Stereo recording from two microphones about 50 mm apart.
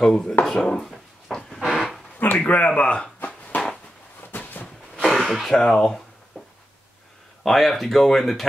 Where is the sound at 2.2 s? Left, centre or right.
Left.